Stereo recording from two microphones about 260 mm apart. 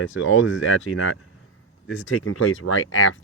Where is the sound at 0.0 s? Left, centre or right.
Left.